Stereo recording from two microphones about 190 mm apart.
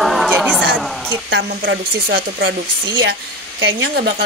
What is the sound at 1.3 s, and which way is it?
Speech, 75° right (ahead or behind).